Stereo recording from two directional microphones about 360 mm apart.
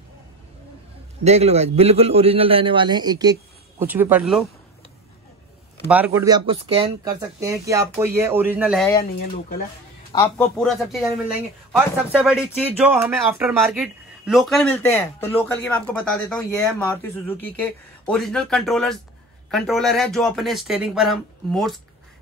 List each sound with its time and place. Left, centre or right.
1.2 s speech: centre
5.9 s speech: centre
10.1 s speech: centre